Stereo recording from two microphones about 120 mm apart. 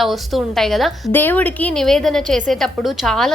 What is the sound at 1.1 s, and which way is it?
A woman's voice, 15° left (ahead or behind).